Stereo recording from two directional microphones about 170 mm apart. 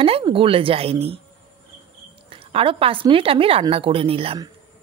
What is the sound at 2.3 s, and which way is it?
A woman's voice, 30° right (ahead or behind).